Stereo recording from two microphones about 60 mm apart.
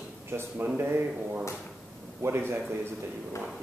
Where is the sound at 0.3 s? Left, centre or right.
Right.